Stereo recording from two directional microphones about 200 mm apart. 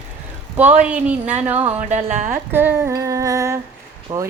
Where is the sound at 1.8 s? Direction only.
40° right (ahead or behind).